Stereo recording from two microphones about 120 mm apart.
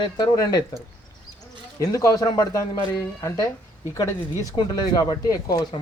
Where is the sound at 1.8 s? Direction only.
30° left (ahead or behind).